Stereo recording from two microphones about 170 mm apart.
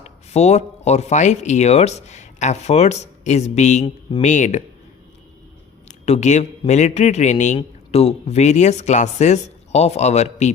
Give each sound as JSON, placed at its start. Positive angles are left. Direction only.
{"t": 0.0, "sound": "speech", "side_deg": 40}
{"t": 6.1, "sound": "a man's voice", "side_deg": 45}